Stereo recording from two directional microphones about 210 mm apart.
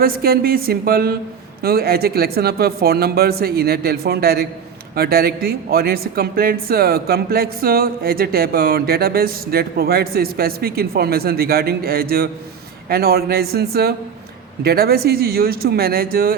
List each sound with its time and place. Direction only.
0.0 s speech: 45° right (ahead or behind)